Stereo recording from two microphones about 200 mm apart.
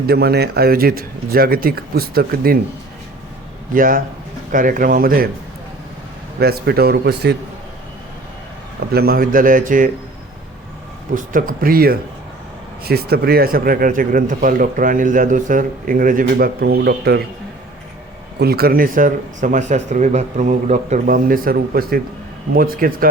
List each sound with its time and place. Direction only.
0.1 s speech: 55° right (ahead or behind)
3.8 s speech: 45° right (ahead or behind)
6.4 s speech: 50° right (ahead or behind)
8.9 s speech: 50° right (ahead or behind)
11.1 s speech: 40° right (ahead or behind)
18.3 s speech: 50° right (ahead or behind)